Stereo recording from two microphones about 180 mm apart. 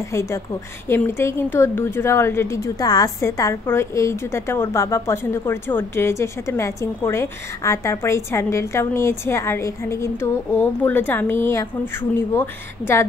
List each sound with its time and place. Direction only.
0.1 s a woman's voice: 15° left (ahead or behind)